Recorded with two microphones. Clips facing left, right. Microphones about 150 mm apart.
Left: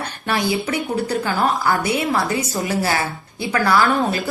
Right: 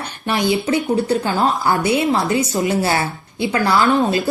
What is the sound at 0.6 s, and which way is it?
A woman's voice, 30° right (ahead or behind).